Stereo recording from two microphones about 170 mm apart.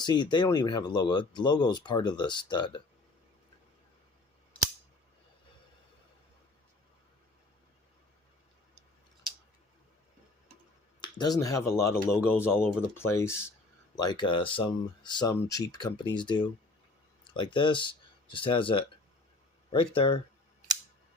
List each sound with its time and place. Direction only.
0.0 s speech: 25° left (ahead or behind)
11.0 s speech: 25° left (ahead or behind)